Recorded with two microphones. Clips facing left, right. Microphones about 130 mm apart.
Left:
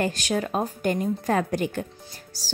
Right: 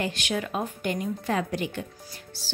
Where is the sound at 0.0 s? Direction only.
40° left (ahead or behind).